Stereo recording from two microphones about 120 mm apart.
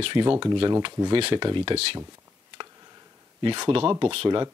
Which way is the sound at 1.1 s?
50° right (ahead or behind).